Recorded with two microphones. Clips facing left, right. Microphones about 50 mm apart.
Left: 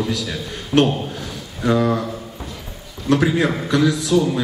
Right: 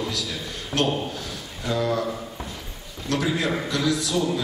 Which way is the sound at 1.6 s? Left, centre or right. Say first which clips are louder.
Left 8 dB; left.